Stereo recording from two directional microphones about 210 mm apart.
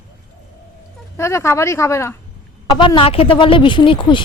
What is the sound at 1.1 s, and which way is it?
A woman's voice, 15° left (ahead or behind).